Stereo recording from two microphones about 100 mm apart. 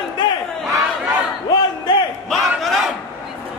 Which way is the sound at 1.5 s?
50° left (ahead or behind).